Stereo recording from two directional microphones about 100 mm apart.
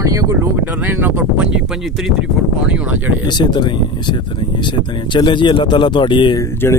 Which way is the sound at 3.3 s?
50° left (ahead or behind).